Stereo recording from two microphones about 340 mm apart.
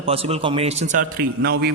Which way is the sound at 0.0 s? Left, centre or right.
Centre.